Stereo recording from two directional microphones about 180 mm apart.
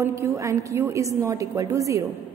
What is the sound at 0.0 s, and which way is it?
A woman's voice, 15° right (ahead or behind).